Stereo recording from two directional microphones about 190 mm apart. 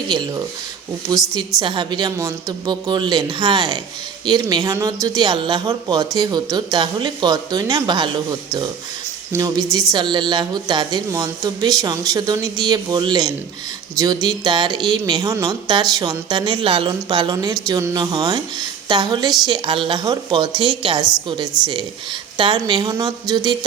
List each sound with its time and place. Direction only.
1.3 s a woman's voice: 20° right (ahead or behind)